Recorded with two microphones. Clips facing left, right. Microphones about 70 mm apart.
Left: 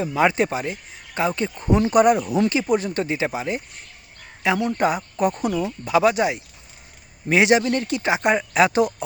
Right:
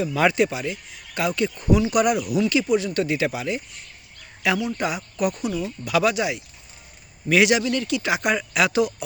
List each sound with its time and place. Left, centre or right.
0.0 s speech: left
4.6 s speech: left